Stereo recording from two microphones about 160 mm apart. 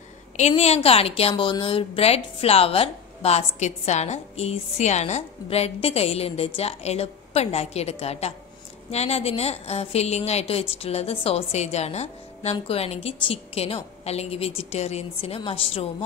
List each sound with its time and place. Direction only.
0.4 s a woman's voice: 40° left (ahead or behind)